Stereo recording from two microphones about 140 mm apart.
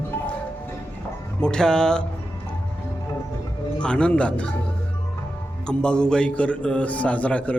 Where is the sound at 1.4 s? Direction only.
5° left (ahead or behind).